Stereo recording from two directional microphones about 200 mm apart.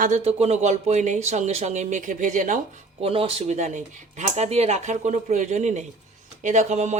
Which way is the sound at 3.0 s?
30° right (ahead or behind).